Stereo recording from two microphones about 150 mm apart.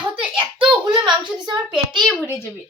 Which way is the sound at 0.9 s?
30° right (ahead or behind).